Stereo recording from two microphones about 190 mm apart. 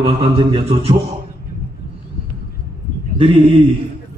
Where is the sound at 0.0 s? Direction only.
30° right (ahead or behind).